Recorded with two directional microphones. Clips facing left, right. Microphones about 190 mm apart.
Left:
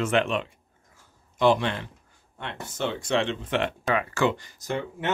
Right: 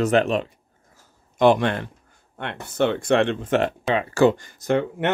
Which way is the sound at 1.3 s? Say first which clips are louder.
Right 4 dB; 55° right (ahead or behind).